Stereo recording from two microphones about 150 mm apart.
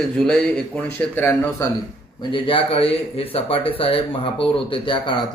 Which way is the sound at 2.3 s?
35° left (ahead or behind).